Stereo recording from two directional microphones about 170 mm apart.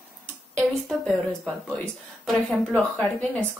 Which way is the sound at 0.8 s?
Centre (ahead or behind).